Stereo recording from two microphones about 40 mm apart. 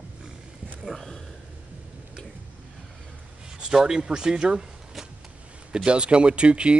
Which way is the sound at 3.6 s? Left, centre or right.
Centre.